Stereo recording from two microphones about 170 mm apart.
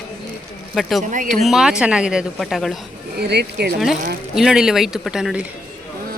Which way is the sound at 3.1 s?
75° right (ahead or behind).